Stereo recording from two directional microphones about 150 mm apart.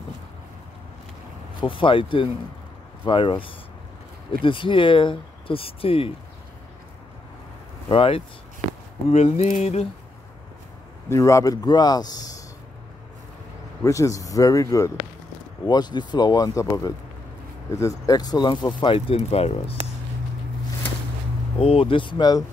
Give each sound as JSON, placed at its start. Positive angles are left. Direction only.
{"t": 1.6, "sound": "speech", "side_deg": 35}
{"t": 7.9, "sound": "speech", "side_deg": 40}
{"t": 9.1, "sound": "speech", "side_deg": 50}
{"t": 11.1, "sound": "a man's voice", "side_deg": 20}
{"t": 13.8, "sound": "a man's voice", "side_deg": 20}
{"t": 21.5, "sound": "speech", "side_deg": 40}